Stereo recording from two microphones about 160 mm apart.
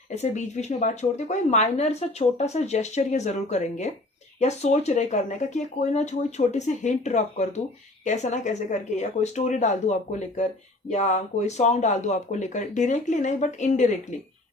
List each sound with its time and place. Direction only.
0.2 s speech: 45° left (ahead or behind)